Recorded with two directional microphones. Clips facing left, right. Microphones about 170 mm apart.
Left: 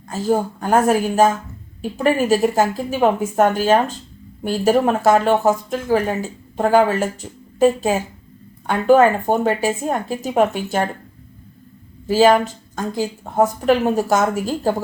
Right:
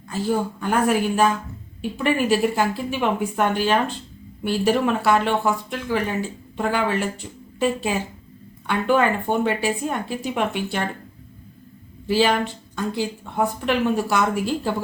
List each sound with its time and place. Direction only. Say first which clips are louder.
0.1 s speech: left 4 dB; 45° left (ahead or behind)
12.0 s speech: left 6 dB; 40° left (ahead or behind)